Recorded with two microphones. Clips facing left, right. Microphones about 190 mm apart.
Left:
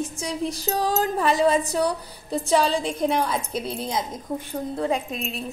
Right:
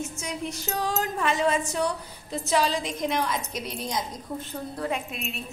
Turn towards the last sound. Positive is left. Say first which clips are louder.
# left 5 dB
turn(degrees=35)  # may be behind; listen again after turning